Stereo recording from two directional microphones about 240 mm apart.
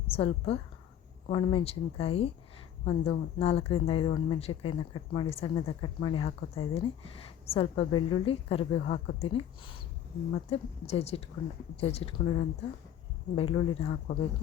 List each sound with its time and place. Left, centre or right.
0.1 s speech: left